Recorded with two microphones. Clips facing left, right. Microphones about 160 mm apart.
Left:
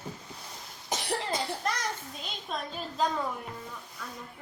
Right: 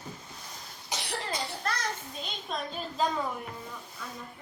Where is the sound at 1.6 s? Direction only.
15° left (ahead or behind).